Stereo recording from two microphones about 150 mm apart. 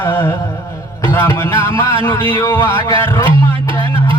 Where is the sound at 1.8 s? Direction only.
35° right (ahead or behind).